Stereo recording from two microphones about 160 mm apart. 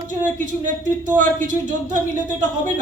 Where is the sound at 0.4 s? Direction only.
55° right (ahead or behind).